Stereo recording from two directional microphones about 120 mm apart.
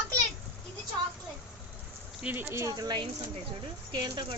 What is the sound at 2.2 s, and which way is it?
Speech, 20° right (ahead or behind).